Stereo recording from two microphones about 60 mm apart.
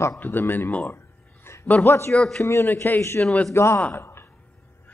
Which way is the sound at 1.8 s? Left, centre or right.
Left.